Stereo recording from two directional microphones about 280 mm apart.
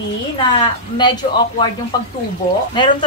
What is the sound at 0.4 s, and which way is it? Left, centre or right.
A woman's voice, centre.